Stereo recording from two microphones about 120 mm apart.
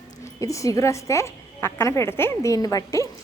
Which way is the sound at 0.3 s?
25° left (ahead or behind).